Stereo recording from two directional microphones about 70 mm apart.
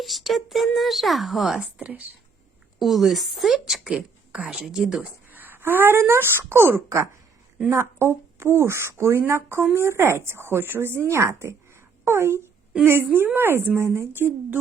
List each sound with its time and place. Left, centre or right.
0.0 s a woman's voice: centre
1.5 s speech: centre
2.7 s a woman's voice: centre
5.3 s speech: right